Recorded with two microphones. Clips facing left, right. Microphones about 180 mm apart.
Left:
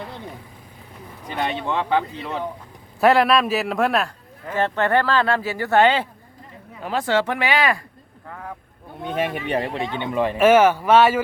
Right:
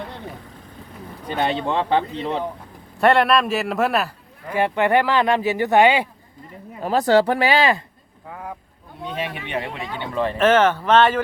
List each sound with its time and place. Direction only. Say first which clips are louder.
1.4 s speech: right 2 dB; 30° right (ahead or behind)
3.0 s a man's voice: even; centre (ahead or behind)
6.7 s speech: right 5 dB; 40° right (ahead or behind)
8.3 s boat: right 2 dB; 10° right (ahead or behind)
9.0 s speech: left 5 dB; 50° left (ahead or behind); by 11.2 s 10° left (ahead or behind)